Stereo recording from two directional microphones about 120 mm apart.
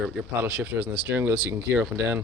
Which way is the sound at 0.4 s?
15° right (ahead or behind).